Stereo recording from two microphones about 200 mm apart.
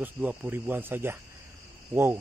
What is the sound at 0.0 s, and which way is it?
A man's voice, 10° right (ahead or behind).